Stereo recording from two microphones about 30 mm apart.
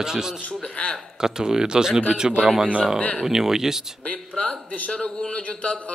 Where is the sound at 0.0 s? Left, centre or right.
Right.